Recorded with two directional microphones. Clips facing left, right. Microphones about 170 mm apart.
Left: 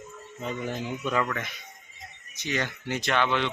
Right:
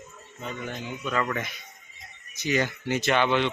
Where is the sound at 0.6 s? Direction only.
30° left (ahead or behind).